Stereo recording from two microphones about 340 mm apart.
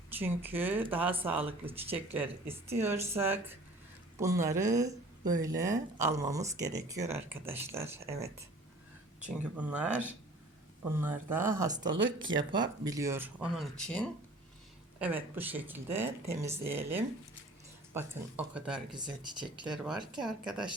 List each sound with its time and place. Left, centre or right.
0.1 s speech: centre
2.5 s speech: centre
2.8 s speech: centre
9.3 s speech: centre